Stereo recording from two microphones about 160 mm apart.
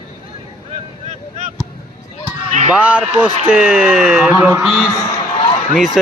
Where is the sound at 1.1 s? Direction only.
45° right (ahead or behind).